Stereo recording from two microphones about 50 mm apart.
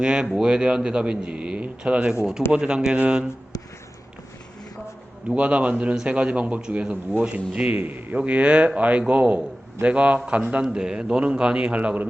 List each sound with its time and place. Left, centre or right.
0.0 s a man's voice: centre
5.3 s a man's voice: right
7.7 s a man's voice: right
8.1 s a man's voice: right